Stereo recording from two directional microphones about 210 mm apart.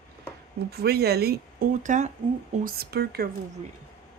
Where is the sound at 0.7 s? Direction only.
50° right (ahead or behind).